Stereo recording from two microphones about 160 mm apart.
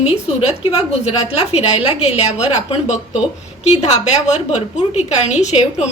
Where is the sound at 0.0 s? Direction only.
40° left (ahead or behind).